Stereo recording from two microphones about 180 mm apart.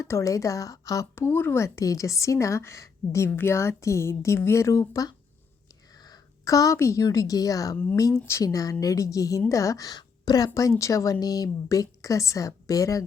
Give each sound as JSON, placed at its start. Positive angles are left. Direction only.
{"t": 0.0, "sound": "a woman's voice", "side_deg": 15}